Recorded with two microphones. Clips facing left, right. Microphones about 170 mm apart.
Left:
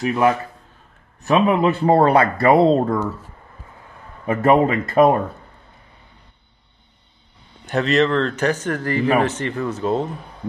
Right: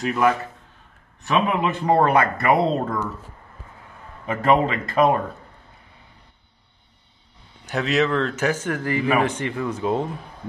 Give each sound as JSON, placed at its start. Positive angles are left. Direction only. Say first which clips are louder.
{"t": 0.0, "sound": "a man's voice", "louder": "left 3 dB", "side_deg": 25}
{"t": 1.2, "sound": "speech", "louder": "left 5 dB", "side_deg": 40}
{"t": 4.3, "sound": "speech", "louder": "left 4 dB", "side_deg": 45}
{"t": 7.7, "sound": "speech", "louder": "left 4 dB", "side_deg": -5}